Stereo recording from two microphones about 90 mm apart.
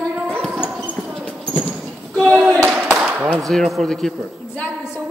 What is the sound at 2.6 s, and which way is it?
Clapping, 10° right (ahead or behind).